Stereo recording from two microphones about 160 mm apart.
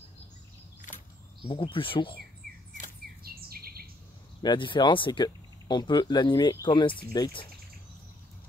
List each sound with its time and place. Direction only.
1.4 s speech: 35° left (ahead or behind)
3.3 s bird: 70° right (ahead or behind)
4.4 s speech: 30° left (ahead or behind)